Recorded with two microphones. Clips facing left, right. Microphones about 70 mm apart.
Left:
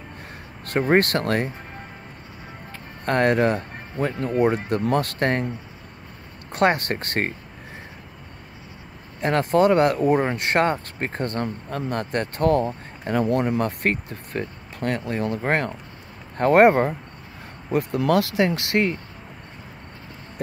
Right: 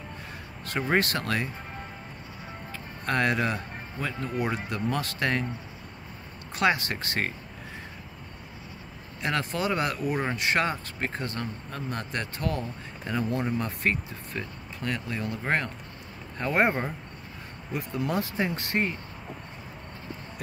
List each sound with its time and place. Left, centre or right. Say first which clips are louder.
0.7 s speech: left 7 dB; left
2.7 s speech: left 5 dB; left
6.5 s speech: left 5 dB; left
9.2 s speech: left 10 dB; left
13.2 s speech: left 8 dB; left
17.9 s speech: left 8 dB; left